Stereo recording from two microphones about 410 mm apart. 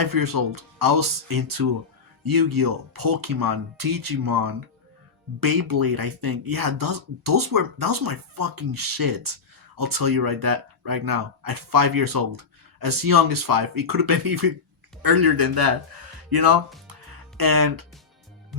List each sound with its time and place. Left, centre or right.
0.0 s speech: right